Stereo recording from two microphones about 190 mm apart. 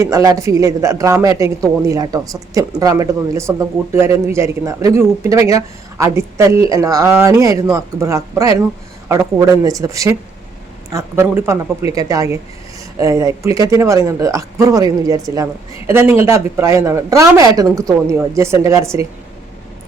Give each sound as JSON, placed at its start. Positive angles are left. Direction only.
{"t": 0.0, "sound": "speech", "side_deg": -15}
{"t": 9.6, "sound": "speech", "side_deg": -15}